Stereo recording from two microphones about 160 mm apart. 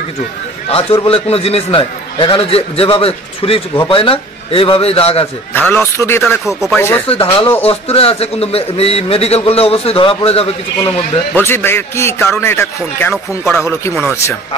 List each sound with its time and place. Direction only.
0.7 s a man's voice: 35° left (ahead or behind)
5.5 s a man's voice: 10° left (ahead or behind)
6.4 s speech: centre (ahead or behind)
7.1 s a man's voice: 35° left (ahead or behind)
11.3 s a man's voice: 15° left (ahead or behind)